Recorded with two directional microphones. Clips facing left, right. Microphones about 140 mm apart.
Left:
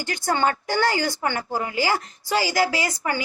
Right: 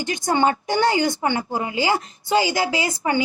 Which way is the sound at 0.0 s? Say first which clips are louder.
Right 3 dB; 20° right (ahead or behind).